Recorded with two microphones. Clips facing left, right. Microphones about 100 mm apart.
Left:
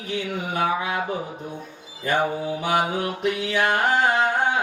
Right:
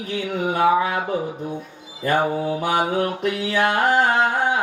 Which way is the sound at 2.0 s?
40° right (ahead or behind).